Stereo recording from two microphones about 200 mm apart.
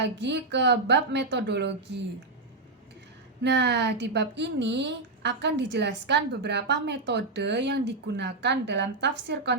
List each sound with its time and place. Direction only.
0.0 s speech: 60° right (ahead or behind)
3.4 s speech: 60° right (ahead or behind)